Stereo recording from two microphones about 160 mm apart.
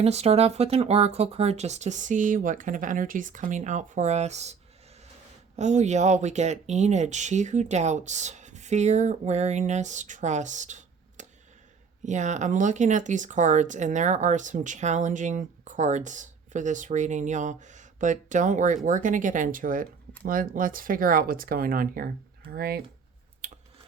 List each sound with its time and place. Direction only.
0.0 s speech: 40° right (ahead or behind)
5.5 s speech: 45° right (ahead or behind); by 22.8 s 75° right (ahead or behind)
23.4 s squish: 55° right (ahead or behind)